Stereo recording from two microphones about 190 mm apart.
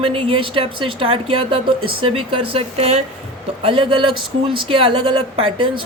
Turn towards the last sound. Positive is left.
turn(degrees=-30)  # may be behind; listen again after turning